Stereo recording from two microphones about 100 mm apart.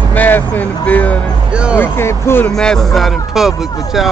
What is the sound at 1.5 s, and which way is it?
Speech, 10° right (ahead or behind).